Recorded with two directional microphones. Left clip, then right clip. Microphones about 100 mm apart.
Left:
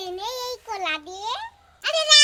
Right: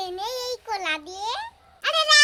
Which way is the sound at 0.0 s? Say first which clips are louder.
Right 1 dB; 10° right (ahead or behind).